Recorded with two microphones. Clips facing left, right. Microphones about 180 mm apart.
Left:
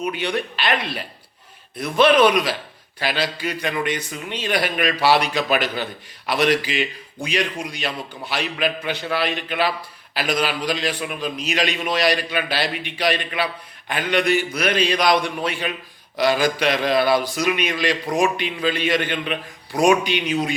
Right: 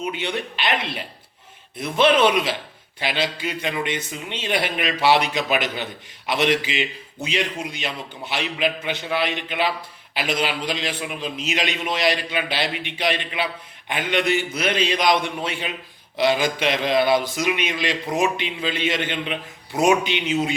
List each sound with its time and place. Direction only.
0.0 s a man's voice: 20° right (ahead or behind)
7.7 s a man's voice: 20° right (ahead or behind)